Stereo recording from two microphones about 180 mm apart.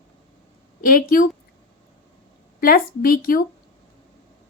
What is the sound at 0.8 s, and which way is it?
Speech, 50° left (ahead or behind).